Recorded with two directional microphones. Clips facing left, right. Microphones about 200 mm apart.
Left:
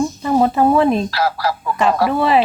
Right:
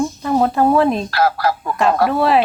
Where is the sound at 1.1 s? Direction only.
50° right (ahead or behind).